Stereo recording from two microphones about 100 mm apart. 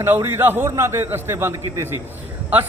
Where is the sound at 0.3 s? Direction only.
20° right (ahead or behind).